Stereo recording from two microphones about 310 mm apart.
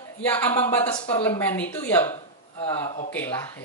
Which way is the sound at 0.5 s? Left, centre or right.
Centre.